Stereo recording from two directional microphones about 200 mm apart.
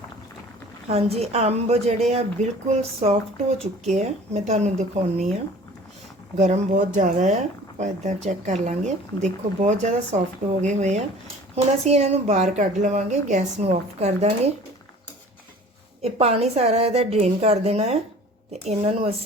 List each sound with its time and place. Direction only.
0.9 s a woman's voice: 30° right (ahead or behind)
16.0 s a woman's voice: 30° right (ahead or behind)